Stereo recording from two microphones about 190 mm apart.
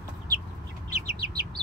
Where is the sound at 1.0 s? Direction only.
55° right (ahead or behind).